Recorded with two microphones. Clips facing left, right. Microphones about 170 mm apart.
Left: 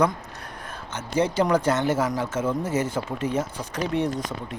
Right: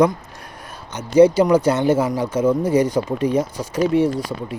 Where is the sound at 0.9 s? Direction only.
15° right (ahead or behind).